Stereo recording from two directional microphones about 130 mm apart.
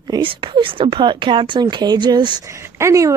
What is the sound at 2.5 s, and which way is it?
Speech, 20° right (ahead or behind).